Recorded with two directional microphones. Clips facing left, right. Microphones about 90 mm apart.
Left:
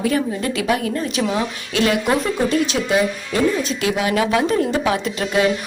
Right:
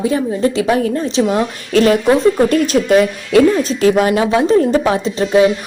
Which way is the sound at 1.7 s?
40° right (ahead or behind).